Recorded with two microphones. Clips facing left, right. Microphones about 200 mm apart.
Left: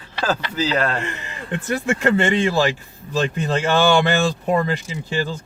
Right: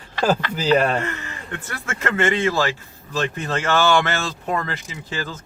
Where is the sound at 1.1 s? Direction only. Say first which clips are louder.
Left 3 dB; 15° left (ahead or behind).